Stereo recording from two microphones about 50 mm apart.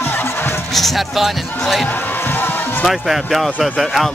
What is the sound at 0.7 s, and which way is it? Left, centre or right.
Speech, centre.